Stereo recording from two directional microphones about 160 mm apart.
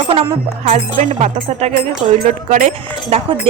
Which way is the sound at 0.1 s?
40° right (ahead or behind).